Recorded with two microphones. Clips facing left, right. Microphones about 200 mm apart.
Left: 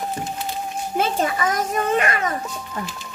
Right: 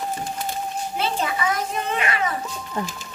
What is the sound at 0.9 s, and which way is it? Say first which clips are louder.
A child's voice: left 4 dB; 50° left (ahead or behind).